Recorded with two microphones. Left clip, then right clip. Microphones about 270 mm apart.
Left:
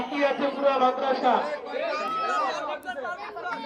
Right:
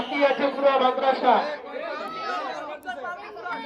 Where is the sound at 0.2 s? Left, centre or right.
Centre.